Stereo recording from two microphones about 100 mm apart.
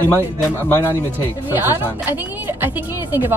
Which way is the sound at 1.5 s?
20° right (ahead or behind).